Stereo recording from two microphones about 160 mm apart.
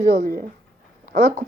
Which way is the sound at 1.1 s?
55° right (ahead or behind).